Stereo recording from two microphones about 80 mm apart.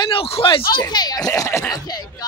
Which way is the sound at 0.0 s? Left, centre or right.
Left.